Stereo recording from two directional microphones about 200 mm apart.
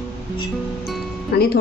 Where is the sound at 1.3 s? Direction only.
50° left (ahead or behind).